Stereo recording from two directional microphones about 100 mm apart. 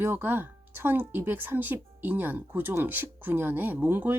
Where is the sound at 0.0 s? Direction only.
20° right (ahead or behind).